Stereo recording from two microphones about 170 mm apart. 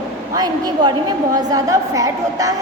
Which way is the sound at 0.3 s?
25° right (ahead or behind).